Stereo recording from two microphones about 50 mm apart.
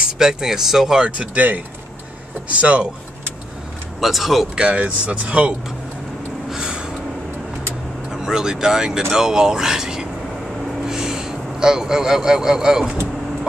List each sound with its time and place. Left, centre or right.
0.2 s speech: centre; by 2.9 s right
4.0 s speech: centre
4.6 s speech: right
6.5 s gasp: centre
8.1 s speech: centre